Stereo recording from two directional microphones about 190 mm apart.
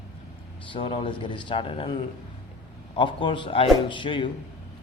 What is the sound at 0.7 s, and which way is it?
A man's voice, 25° left (ahead or behind).